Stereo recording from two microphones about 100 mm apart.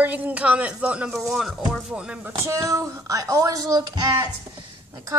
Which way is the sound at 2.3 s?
30° right (ahead or behind).